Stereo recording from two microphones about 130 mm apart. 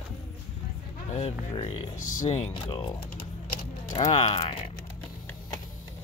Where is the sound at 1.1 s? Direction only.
45° left (ahead or behind).